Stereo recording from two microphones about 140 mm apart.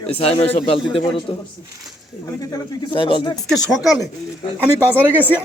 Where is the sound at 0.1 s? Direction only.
45° left (ahead or behind).